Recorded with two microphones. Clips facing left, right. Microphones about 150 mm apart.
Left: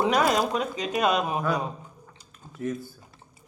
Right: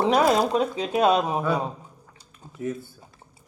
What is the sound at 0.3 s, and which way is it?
Speech, 30° right (ahead or behind).